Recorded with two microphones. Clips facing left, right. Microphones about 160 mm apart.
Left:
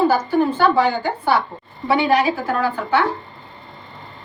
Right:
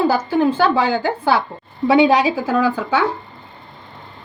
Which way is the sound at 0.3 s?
90° right.